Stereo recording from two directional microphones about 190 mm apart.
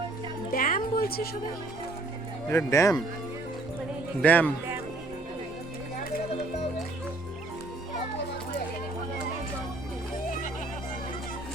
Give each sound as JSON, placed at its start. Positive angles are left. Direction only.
{"t": 0.5, "sound": "music", "side_deg": 45}
{"t": 2.5, "sound": "speech", "side_deg": 15}
{"t": 4.2, "sound": "speech", "side_deg": 10}